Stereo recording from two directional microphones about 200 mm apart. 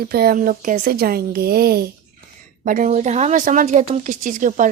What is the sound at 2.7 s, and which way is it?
Speech, 40° right (ahead or behind).